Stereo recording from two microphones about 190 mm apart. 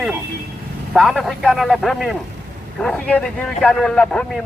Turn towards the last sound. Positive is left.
turn(degrees=5)  # may be behind; listen again after turning